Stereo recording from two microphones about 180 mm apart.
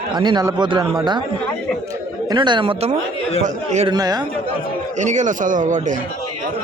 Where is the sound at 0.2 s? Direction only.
25° right (ahead or behind).